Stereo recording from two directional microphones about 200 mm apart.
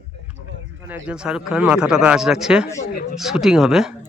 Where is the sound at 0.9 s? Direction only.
5° right (ahead or behind).